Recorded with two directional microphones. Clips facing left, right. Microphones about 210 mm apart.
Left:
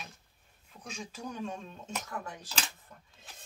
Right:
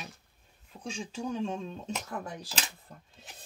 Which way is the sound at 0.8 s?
30° right (ahead or behind).